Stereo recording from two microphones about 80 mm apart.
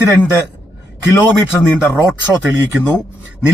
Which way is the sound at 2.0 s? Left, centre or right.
Right.